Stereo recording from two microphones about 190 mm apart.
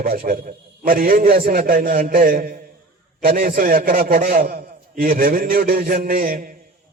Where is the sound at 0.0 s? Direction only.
45° right (ahead or behind).